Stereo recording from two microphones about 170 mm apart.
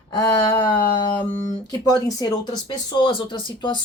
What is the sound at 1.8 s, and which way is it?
Speech, 20° left (ahead or behind).